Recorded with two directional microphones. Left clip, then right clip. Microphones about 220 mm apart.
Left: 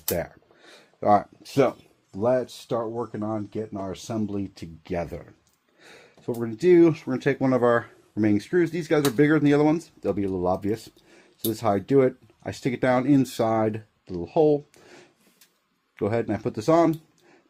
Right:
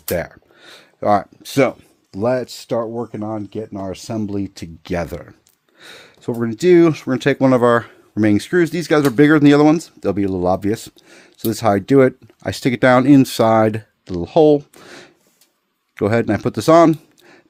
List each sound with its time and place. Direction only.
0.1 s speech: 35° right (ahead or behind)
2.1 s speech: 45° right (ahead or behind)